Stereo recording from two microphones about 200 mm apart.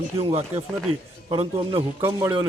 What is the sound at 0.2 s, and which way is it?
A man's voice, 30° right (ahead or behind).